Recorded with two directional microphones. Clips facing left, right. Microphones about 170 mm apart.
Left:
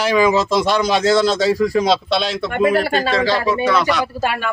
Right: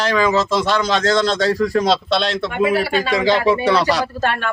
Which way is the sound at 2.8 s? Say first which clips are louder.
Left 1 dB; 45° left (ahead or behind).